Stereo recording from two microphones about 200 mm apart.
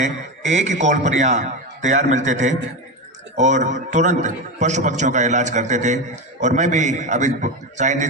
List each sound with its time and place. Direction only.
0.0 s a man's voice: 35° right (ahead or behind)